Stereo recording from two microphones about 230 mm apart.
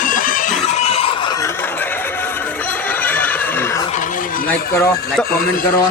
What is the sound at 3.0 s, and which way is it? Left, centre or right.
Neigh, centre.